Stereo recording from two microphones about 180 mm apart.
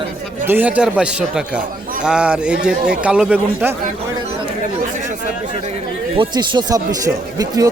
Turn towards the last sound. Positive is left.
turn(degrees=-20)  # may be behind; listen again after turning